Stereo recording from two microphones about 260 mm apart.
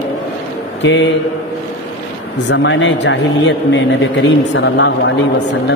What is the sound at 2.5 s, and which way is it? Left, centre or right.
Speech, left.